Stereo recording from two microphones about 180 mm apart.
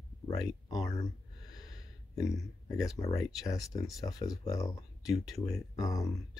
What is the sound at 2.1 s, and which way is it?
Speech, 15° left (ahead or behind).